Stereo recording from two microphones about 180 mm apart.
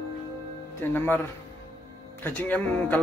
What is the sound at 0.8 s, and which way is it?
Speech, 10° left (ahead or behind).